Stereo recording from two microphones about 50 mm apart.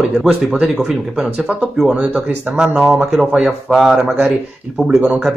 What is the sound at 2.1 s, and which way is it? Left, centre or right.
Speech, right.